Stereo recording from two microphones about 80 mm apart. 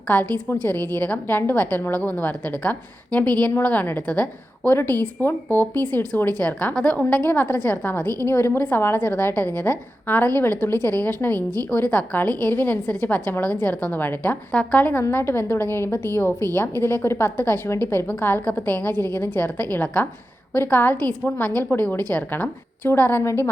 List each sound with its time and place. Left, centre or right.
0.1 s a woman's voice: left